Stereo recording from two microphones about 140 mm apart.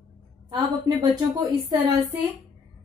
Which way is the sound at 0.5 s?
30° right (ahead or behind).